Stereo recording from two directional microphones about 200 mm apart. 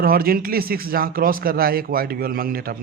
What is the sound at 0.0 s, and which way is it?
A man's voice, 45° right (ahead or behind).